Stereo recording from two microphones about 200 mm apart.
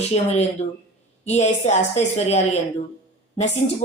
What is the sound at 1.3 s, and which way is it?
Speech, 35° left (ahead or behind).